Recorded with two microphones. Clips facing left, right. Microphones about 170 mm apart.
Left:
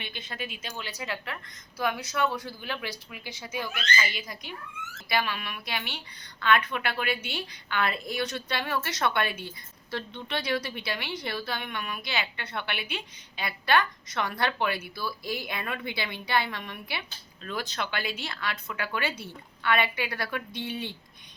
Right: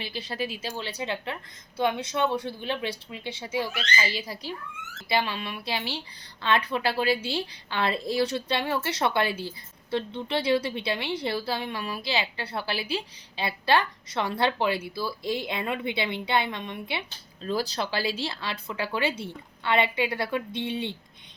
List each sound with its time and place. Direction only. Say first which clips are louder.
0.0 s a woman's voice: right 6 dB; 35° right (ahead or behind)